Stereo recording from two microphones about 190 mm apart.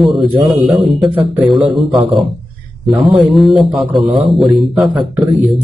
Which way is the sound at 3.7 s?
Centre (ahead or behind).